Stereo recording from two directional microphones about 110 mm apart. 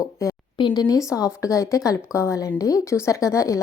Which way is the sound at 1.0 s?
30° left (ahead or behind).